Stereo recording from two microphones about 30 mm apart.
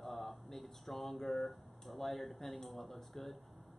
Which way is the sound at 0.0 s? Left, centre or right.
Centre.